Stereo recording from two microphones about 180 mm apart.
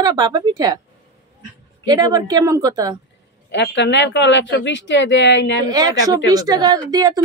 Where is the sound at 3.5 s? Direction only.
75° left (ahead or behind).